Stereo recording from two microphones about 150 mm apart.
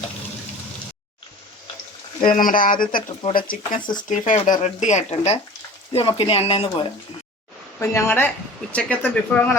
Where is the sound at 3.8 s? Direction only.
30° left (ahead or behind).